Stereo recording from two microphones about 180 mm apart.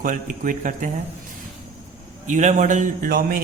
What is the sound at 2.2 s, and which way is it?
Speech, 45° right (ahead or behind).